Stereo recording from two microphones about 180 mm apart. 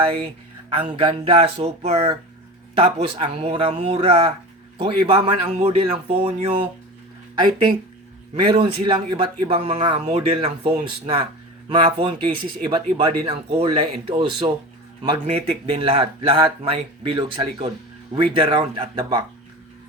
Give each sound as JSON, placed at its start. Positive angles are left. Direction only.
{"t": 0.8, "sound": "speech", "side_deg": -30}
{"t": 8.4, "sound": "speech", "side_deg": -30}
{"t": 9.6, "sound": "speech", "side_deg": -35}